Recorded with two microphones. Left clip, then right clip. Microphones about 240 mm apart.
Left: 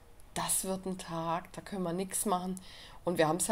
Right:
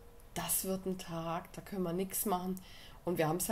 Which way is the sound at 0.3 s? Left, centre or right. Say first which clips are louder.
Left 3 dB; left.